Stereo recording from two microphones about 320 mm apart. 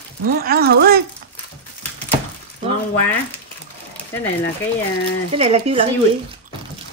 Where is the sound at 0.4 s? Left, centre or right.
Right.